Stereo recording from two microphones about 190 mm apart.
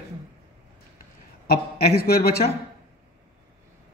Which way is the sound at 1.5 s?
55° left (ahead or behind).